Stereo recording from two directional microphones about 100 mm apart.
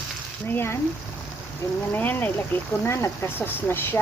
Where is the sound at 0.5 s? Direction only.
25° left (ahead or behind).